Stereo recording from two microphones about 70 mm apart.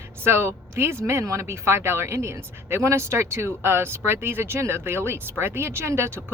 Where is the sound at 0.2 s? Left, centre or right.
Right.